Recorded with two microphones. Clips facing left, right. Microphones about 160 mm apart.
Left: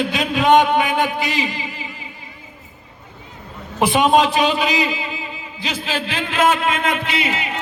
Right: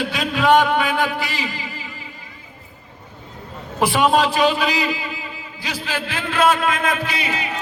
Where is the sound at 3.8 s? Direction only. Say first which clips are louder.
Left 2 dB; 20° left (ahead or behind).